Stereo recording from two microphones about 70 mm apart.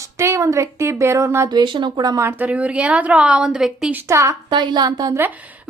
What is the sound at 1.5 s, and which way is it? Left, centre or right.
Speech, right.